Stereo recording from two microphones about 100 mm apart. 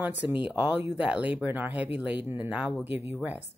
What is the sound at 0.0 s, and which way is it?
Speech, 15° right (ahead or behind).